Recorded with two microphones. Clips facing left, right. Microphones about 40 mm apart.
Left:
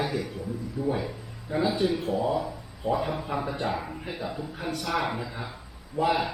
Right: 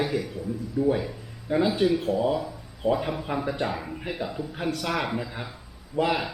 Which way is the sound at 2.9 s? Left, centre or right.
Centre.